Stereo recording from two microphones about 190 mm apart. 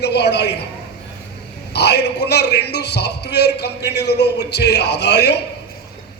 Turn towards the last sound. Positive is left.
turn(degrees=60)  # may be behind; listen again after turning